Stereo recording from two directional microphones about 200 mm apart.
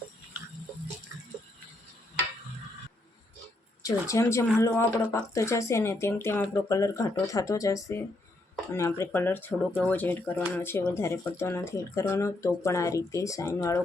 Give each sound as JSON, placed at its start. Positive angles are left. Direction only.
{"t": 3.8, "sound": "speech", "side_deg": 15}